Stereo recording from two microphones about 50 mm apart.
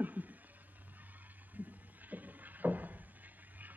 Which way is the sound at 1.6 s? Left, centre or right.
Right.